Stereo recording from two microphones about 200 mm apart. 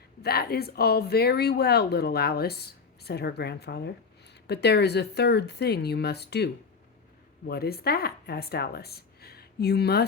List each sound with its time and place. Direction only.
0.2 s speech: 50° left (ahead or behind)